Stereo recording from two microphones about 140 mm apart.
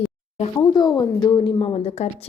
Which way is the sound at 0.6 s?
30° left (ahead or behind).